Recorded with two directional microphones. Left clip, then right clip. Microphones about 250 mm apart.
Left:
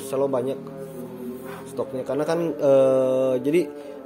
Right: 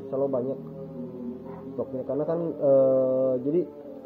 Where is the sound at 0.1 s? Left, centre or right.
Left.